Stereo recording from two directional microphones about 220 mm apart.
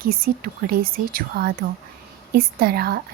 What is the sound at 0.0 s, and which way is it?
Speech, 40° right (ahead or behind).